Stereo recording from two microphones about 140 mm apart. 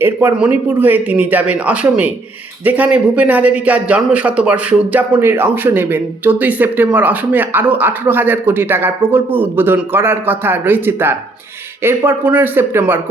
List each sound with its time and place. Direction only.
0.0 s speech: 15° right (ahead or behind)